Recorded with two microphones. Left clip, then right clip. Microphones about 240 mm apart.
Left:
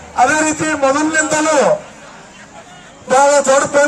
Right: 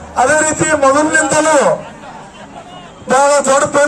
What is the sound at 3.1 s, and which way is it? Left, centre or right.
Speech, centre.